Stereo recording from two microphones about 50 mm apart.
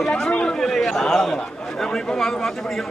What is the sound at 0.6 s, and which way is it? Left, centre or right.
A man's voice, centre.